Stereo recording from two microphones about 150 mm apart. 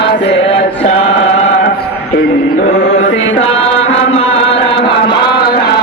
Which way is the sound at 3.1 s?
40° left (ahead or behind).